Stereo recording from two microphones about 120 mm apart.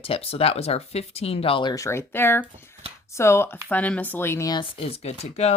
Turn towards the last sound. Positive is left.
turn(degrees=65)  # may be behind; listen again after turning